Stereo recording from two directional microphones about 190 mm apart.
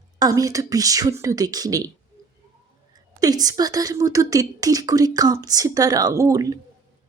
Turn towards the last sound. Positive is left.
turn(degrees=-20)  # may be behind; listen again after turning